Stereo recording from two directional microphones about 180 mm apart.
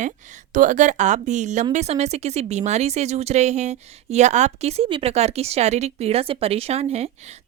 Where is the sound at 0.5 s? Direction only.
45° right (ahead or behind).